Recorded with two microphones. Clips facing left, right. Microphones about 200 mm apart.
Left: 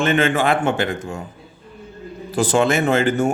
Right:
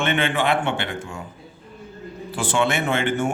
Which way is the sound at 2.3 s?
40° left (ahead or behind).